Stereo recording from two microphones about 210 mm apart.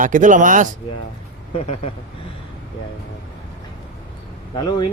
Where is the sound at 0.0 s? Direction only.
40° right (ahead or behind).